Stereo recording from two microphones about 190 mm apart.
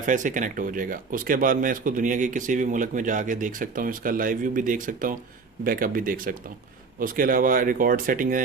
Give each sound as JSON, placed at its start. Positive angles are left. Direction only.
{"t": 0.0, "sound": "speech", "side_deg": -45}